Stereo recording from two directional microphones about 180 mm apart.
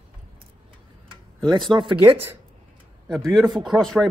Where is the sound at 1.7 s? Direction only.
25° right (ahead or behind).